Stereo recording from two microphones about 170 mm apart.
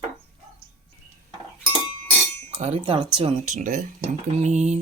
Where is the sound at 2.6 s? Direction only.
35° right (ahead or behind).